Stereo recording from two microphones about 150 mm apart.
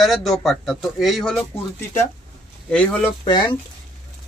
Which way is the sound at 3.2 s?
30° left (ahead or behind).